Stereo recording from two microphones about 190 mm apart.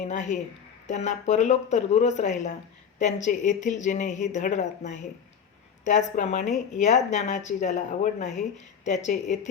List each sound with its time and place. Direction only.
0.0 s a woman's voice: 40° left (ahead or behind)